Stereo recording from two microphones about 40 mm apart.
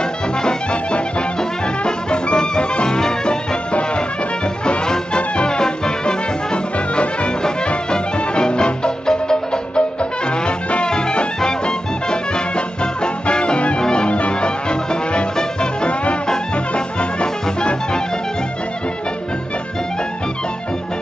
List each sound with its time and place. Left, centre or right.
0.4 s music: centre
4.6 s music: left